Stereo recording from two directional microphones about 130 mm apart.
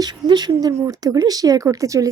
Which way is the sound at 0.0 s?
35° right (ahead or behind).